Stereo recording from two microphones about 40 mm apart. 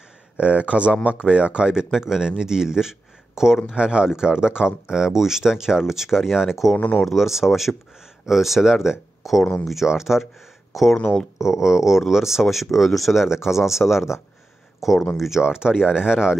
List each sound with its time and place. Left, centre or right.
0.4 s speech: right; by 3.5 s centre
3.7 s speech: right
6.8 s speech: left
7.1 s speech: centre
11.4 s speech: centre
13.2 s speech: centre
15.4 s speech: centre